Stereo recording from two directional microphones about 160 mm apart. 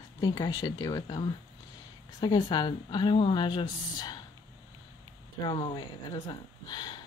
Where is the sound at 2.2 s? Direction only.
25° left (ahead or behind).